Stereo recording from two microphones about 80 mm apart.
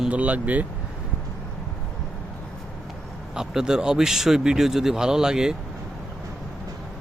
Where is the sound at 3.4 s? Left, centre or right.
Centre.